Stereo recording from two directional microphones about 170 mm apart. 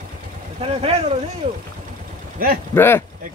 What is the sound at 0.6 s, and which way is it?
Speech, 35° right (ahead or behind).